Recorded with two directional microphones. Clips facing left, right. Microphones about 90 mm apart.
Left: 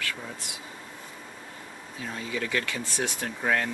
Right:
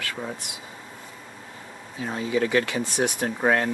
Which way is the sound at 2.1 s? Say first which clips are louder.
Right 8 dB; 35° right (ahead or behind).